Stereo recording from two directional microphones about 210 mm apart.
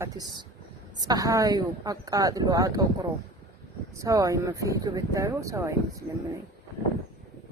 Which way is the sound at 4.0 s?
15° right (ahead or behind).